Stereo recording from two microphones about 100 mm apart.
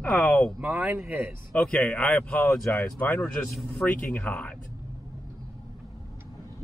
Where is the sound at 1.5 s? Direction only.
15° left (ahead or behind).